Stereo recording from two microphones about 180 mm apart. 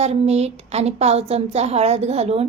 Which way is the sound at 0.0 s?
35° right (ahead or behind).